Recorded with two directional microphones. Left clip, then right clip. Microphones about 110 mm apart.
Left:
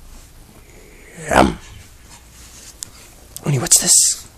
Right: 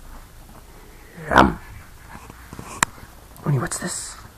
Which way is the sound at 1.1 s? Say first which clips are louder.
Left 1 dB; 40° left (ahead or behind).